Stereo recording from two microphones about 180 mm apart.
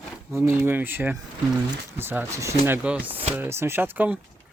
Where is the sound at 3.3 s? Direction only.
15° right (ahead or behind).